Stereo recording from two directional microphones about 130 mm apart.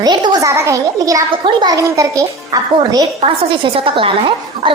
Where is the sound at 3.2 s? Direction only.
40° right (ahead or behind).